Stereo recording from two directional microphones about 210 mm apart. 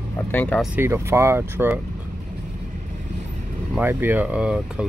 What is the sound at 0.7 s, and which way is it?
Speech, 10° right (ahead or behind).